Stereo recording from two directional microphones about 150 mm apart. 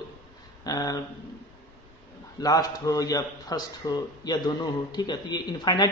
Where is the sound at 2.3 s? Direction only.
25° left (ahead or behind).